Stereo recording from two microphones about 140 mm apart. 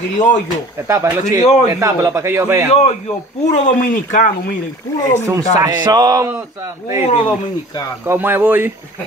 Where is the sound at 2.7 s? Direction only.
50° left (ahead or behind).